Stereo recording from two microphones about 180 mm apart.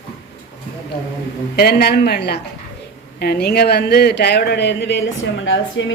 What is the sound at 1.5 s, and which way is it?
A woman's voice, 60° left (ahead or behind).